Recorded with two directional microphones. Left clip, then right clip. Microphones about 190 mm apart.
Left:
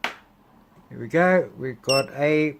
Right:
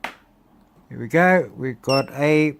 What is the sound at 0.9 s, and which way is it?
Speech, 30° right (ahead or behind).